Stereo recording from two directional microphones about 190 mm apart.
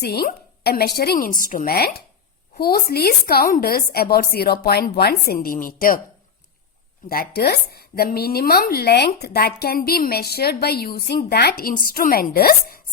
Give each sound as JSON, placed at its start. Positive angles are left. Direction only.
{"t": 0.0, "sound": "a woman's voice", "side_deg": 55}
{"t": 7.1, "sound": "a woman's voice", "side_deg": 55}